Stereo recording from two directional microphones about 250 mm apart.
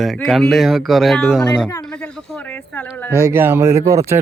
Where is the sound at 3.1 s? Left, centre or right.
Centre.